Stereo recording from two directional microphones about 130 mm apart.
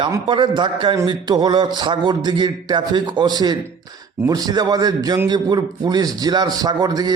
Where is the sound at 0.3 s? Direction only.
40° right (ahead or behind).